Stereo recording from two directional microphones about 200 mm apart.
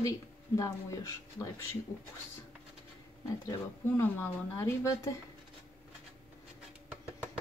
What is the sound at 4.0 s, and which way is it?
Speech, 10° left (ahead or behind).